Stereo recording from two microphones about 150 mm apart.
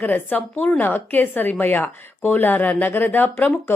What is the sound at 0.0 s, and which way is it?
A woman's voice, 10° left (ahead or behind).